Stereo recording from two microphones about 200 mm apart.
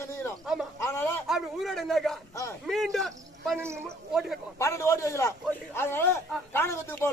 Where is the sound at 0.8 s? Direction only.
15° left (ahead or behind).